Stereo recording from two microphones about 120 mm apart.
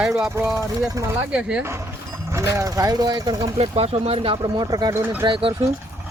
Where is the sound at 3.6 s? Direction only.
60° right (ahead or behind).